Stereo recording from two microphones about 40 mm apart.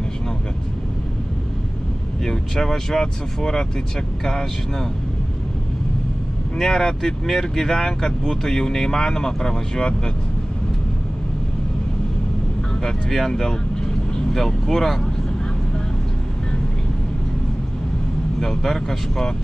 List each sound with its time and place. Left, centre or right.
2.2 s speech: centre
6.6 s speech: centre
12.8 s speech: centre
13.3 s speech: centre
18.4 s speech: centre